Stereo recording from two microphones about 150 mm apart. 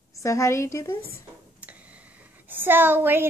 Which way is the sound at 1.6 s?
10° right (ahead or behind).